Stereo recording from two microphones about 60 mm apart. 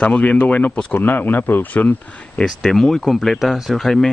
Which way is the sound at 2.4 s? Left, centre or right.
Centre.